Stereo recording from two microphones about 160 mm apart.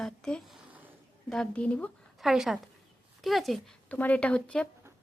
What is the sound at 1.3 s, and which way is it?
A woman's voice, 5° left (ahead or behind).